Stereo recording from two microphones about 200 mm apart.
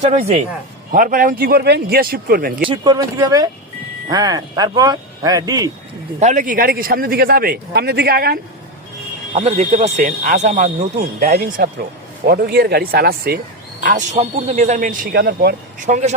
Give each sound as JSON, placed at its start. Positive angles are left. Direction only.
{"t": 0.0, "sound": "speech", "side_deg": -30}
{"t": 0.9, "sound": "speech", "side_deg": -45}
{"t": 2.6, "sound": "speech", "side_deg": -20}
{"t": 6.1, "sound": "speech", "side_deg": -35}
{"t": 9.3, "sound": "speech", "side_deg": -30}
{"t": 10.0, "sound": "speech", "side_deg": -45}
{"t": 13.8, "sound": "speech", "side_deg": -35}
{"t": 15.9, "sound": "speech", "side_deg": -35}